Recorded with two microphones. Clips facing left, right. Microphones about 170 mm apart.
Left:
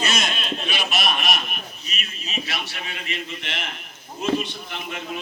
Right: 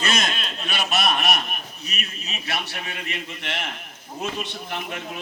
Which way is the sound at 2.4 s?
50° right (ahead or behind).